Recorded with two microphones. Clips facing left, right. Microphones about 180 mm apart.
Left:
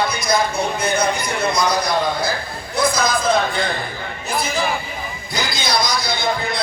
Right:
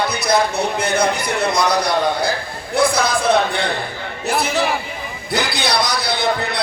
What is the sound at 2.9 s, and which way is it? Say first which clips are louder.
Speech: right 2 dB; 70° right (ahead or behind).